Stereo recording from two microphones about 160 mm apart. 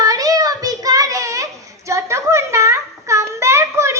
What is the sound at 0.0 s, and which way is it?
Child singing, 20° right (ahead or behind).